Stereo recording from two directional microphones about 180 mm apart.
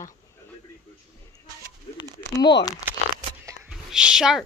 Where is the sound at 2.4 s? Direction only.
25° left (ahead or behind).